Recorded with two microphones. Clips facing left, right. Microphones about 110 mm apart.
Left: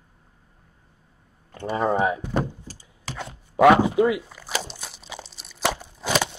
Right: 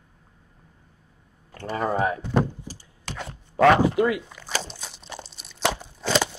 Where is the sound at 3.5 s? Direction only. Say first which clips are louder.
Left 2 dB; 15° left (ahead or behind).